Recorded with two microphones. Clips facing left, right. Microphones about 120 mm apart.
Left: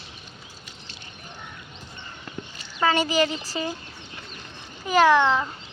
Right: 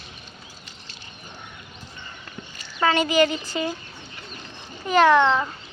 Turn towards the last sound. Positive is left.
turn(degrees=5)  # may be behind; listen again after turning